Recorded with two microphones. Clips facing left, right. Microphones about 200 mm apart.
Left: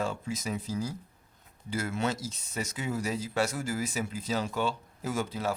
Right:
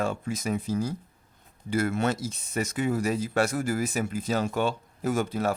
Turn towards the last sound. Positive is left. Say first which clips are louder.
# right 5 dB
turn(degrees=-55)  # may be behind; listen again after turning